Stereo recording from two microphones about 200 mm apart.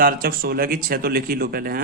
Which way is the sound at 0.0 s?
45° right (ahead or behind).